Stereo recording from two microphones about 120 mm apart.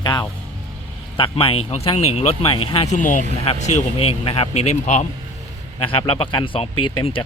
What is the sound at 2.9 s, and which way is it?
Speech, 90° left.